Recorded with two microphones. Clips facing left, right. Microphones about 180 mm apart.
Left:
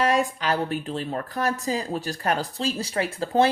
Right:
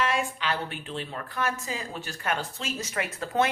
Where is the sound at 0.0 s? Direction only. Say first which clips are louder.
Left 6 dB; 40° left (ahead or behind).